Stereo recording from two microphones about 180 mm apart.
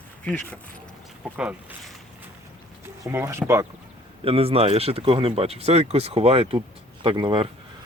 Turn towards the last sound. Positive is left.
turn(degrees=-30)  # may be behind; listen again after turning